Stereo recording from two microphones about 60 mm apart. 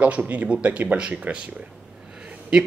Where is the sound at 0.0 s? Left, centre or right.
Right.